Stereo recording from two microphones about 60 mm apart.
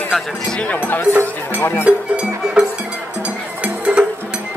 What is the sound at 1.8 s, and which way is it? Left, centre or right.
Speech, centre.